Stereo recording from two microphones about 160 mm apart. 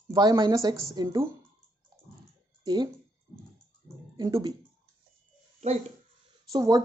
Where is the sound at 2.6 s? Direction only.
25° right (ahead or behind).